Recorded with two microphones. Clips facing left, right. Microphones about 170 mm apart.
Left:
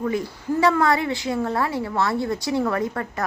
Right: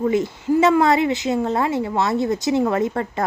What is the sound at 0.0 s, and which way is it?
A woman's voice, 25° right (ahead or behind).